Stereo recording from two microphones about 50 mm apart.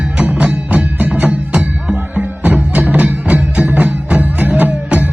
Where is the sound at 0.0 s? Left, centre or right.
Right.